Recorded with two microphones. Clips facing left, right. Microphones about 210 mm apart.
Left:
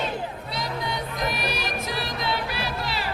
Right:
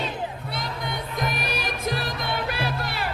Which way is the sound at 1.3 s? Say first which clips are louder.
Even; 50° right (ahead or behind).